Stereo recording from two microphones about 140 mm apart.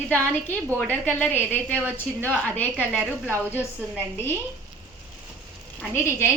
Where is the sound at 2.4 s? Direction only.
10° left (ahead or behind).